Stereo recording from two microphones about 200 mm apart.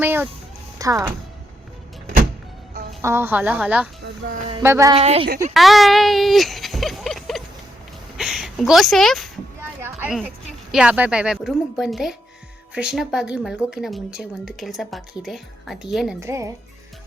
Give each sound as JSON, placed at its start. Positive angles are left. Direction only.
{"t": 0.0, "sound": "speech", "side_deg": -10}
{"t": 3.0, "sound": "speech", "side_deg": -10}
{"t": 4.3, "sound": "a woman's voice", "side_deg": -40}
{"t": 4.6, "sound": "speech", "side_deg": -15}
{"t": 4.9, "sound": "a woman's voice", "side_deg": -30}
{"t": 5.5, "sound": "speech", "side_deg": 0}
{"t": 8.2, "sound": "a sound", "side_deg": 0}
{"t": 10.0, "sound": "a woman's voice", "side_deg": 0}
{"t": 16.2, "sound": "speech", "side_deg": -15}